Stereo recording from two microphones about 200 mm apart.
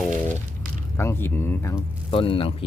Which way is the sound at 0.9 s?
10° left (ahead or behind).